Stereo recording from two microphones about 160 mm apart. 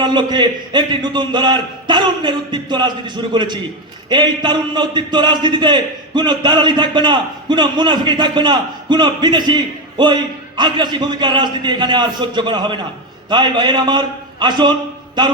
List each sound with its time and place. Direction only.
0.0 s a man's voice: 30° right (ahead or behind)